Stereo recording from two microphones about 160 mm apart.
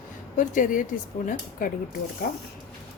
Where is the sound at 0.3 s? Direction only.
55° left (ahead or behind).